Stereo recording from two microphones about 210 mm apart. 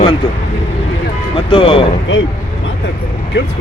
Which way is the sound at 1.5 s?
25° left (ahead or behind).